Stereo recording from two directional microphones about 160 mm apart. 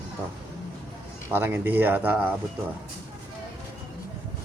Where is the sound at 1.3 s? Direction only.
15° right (ahead or behind).